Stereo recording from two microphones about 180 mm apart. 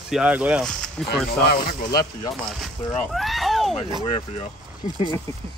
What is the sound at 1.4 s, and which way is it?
Speech, 60° left (ahead or behind).